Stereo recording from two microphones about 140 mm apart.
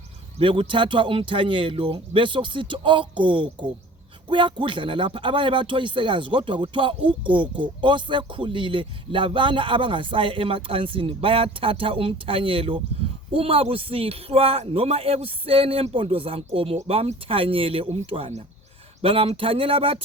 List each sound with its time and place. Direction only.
0.3 s a man's voice: 40° right (ahead or behind)